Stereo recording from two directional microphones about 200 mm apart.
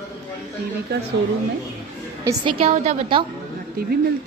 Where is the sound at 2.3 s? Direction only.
25° right (ahead or behind).